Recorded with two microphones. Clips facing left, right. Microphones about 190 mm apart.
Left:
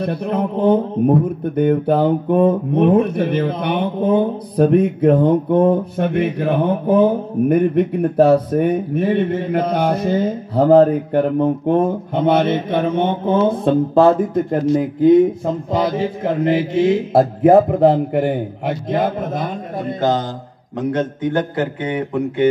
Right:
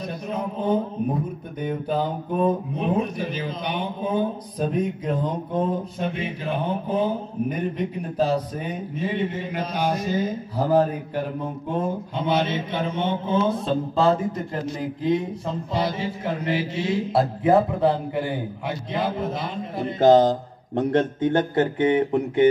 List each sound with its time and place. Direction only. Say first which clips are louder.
0.0 s speech: left 9 dB; 65° left (ahead or behind)
15.4 s mantra: left 7 dB; 55° left (ahead or behind)
20.7 s a man's voice: left 1 dB; 25° right (ahead or behind)